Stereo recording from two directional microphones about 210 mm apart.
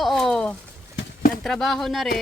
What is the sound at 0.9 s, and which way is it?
Clip-clop, 45° left (ahead or behind).